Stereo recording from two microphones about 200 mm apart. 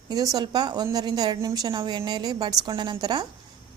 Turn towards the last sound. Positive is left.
turn(degrees=-20)  # may be behind; listen again after turning